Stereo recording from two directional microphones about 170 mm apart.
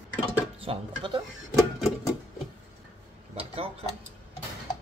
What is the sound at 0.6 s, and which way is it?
Speech, 30° right (ahead or behind).